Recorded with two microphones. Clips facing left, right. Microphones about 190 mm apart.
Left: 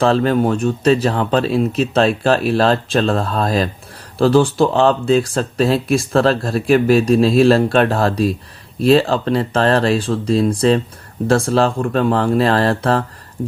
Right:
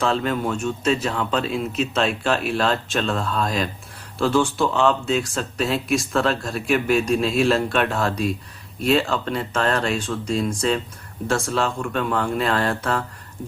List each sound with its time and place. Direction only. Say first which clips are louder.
0.0 s speech: left 8 dB; 35° left (ahead or behind)